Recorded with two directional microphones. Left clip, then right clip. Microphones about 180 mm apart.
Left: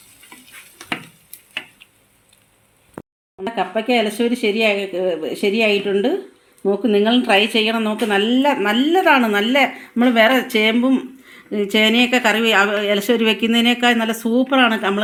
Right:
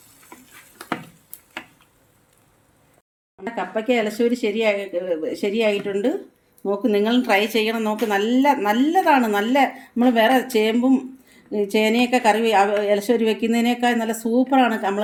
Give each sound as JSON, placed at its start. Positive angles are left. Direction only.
{"t": 3.4, "sound": "a woman's voice", "side_deg": 40}